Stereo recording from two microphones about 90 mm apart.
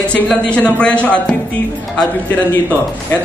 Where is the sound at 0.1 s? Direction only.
15° left (ahead or behind).